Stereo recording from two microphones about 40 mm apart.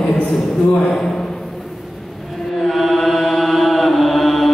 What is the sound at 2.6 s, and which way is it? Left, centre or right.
Chant, centre.